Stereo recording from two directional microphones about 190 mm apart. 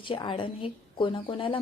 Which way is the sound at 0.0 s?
25° left (ahead or behind).